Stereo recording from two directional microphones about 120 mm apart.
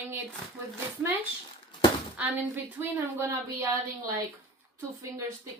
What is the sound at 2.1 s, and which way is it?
A woman's voice, 15° right (ahead or behind).